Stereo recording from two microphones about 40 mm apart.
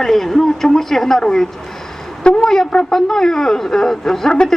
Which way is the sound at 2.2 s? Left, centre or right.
Left.